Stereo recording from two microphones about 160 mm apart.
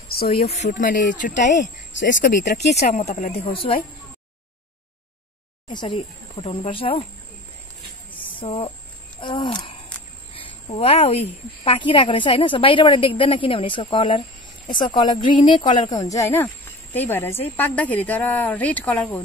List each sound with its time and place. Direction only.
0.3 s speech: 40° left (ahead or behind)
2.8 s speech: 45° left (ahead or behind)
3.3 s a woman's voice: 35° left (ahead or behind)
5.7 s a woman's voice: 30° left (ahead or behind)
8.1 s a sound: 10° left (ahead or behind)
8.4 s a woman's voice: 30° left (ahead or behind)
10.3 s a sound: 35° left (ahead or behind)
11.6 s a woman's voice: 30° left (ahead or behind); by 19.2 s 10° left (ahead or behind)